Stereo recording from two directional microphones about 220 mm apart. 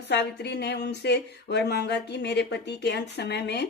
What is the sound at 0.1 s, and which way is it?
A woman's voice, 50° left (ahead or behind).